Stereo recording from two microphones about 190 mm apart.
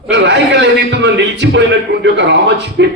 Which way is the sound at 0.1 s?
65° right (ahead or behind).